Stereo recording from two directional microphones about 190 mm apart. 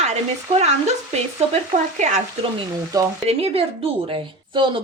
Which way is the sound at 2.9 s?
20° right (ahead or behind).